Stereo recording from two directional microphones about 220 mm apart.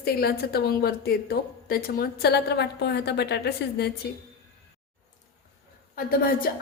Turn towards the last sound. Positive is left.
turn(degrees=40)  # may be behind; listen again after turning